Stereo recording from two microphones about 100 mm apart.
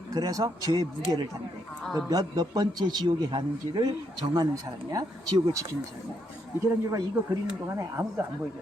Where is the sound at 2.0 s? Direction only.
40° right (ahead or behind).